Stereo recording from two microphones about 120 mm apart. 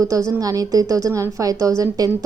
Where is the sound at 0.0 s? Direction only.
25° right (ahead or behind).